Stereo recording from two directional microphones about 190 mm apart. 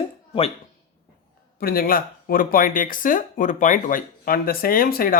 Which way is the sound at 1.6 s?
50° left (ahead or behind).